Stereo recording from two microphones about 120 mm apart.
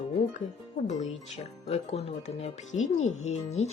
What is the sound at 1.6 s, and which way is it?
Speech, 60° left (ahead or behind).